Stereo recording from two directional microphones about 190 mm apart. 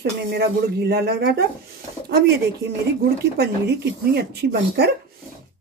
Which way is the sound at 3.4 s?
60° right (ahead or behind).